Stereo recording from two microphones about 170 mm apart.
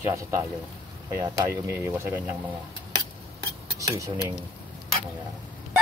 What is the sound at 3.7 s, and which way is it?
Speech, 20° right (ahead or behind).